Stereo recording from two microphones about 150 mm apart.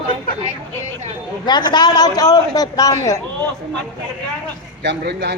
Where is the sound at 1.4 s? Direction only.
30° left (ahead or behind).